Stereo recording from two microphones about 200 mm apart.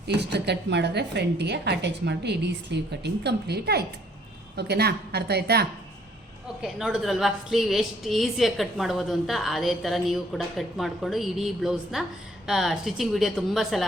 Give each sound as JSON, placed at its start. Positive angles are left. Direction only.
{"t": 0.1, "sound": "a woman's voice", "side_deg": -55}
{"t": 6.6, "sound": "a woman's voice", "side_deg": 0}